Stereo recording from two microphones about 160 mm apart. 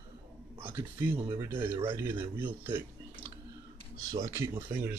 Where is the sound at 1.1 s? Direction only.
15° right (ahead or behind).